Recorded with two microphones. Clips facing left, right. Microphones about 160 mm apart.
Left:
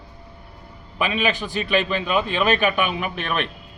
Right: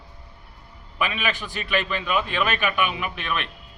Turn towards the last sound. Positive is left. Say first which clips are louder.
# left 4 dB
turn(degrees=40)  # may be behind; listen again after turning